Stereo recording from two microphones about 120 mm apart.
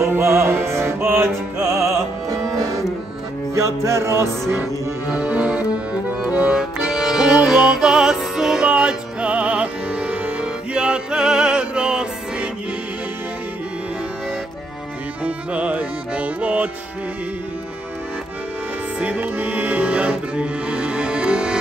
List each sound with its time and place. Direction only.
0.0 s music: 20° right (ahead or behind)
5.1 s accordion: 10° right (ahead or behind)
6.2 s music: 10° right (ahead or behind)
15.2 s music: 10° right (ahead or behind)
18.9 s music: 15° right (ahead or behind)